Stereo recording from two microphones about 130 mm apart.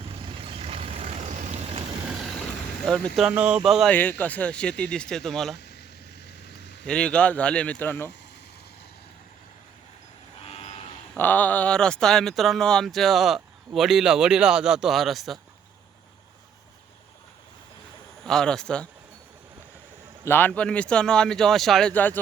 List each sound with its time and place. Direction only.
0.4 s vehicle: 45° right (ahead or behind)
2.0 s vehicle: 5° right (ahead or behind)
2.8 s speech: 5° left (ahead or behind)
3.2 s speech: 10° right (ahead or behind)
3.9 s speech: 15° left (ahead or behind)
6.8 s speech: 5° left (ahead or behind)
10.4 s vehicle: 50° left (ahead or behind)
11.2 s speech: 15° left (ahead or behind)
18.2 s speech: centre (ahead or behind)
20.2 s speech: 15° left (ahead or behind)